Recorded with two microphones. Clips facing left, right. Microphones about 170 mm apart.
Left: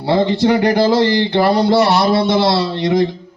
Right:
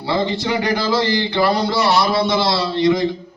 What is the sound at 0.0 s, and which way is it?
Speech, 55° left (ahead or behind).